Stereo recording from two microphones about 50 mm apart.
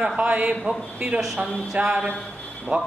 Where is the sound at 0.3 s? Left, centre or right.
Right.